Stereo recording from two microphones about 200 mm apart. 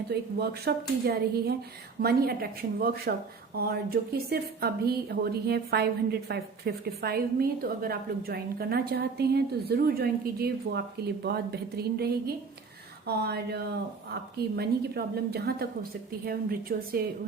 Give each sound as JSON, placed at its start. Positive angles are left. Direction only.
{"t": 0.1, "sound": "a woman's voice", "side_deg": -55}